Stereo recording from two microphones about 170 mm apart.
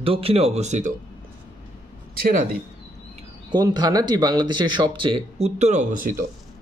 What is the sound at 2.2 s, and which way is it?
Speech, 55° right (ahead or behind).